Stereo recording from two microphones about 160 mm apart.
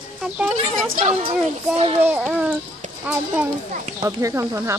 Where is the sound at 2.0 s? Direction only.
10° right (ahead or behind).